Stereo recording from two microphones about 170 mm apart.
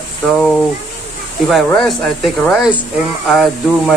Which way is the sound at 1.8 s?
Centre (ahead or behind).